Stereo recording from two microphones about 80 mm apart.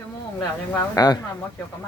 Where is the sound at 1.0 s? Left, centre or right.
Left.